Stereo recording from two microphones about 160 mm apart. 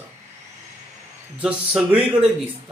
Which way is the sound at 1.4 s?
5° right (ahead or behind).